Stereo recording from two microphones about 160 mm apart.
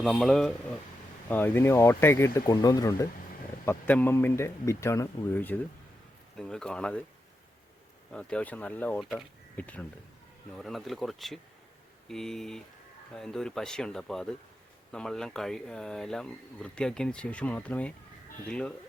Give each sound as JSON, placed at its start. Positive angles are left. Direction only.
{"t": 0.0, "sound": "speech", "side_deg": 0}
{"t": 1.3, "sound": "a man's voice", "side_deg": 10}
{"t": 3.7, "sound": "a man's voice", "side_deg": 10}
{"t": 8.1, "sound": "a man's voice", "side_deg": 5}